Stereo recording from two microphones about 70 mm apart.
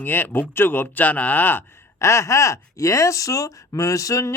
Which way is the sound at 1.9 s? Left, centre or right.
Left.